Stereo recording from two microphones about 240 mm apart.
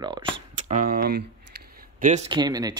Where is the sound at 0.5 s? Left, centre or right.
Right.